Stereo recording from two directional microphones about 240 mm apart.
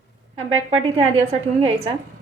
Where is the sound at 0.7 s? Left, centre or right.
Right.